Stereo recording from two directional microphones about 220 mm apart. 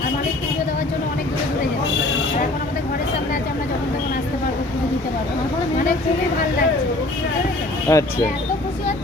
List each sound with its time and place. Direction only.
7.9 s speech: 15° left (ahead or behind)